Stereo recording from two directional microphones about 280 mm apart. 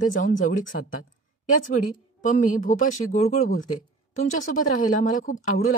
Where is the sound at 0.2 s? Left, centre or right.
Left.